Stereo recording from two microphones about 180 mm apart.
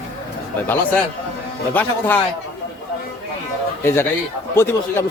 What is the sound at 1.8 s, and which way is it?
Speech, 10° left (ahead or behind).